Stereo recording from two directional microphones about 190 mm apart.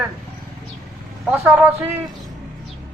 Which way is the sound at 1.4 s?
5° right (ahead or behind).